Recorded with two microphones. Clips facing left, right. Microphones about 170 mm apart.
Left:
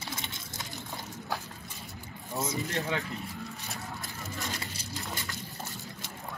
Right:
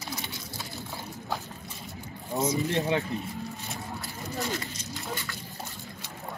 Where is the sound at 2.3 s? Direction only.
20° right (ahead or behind).